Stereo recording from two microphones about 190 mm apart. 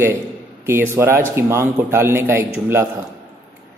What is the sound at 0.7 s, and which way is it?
A man's voice, 10° right (ahead or behind).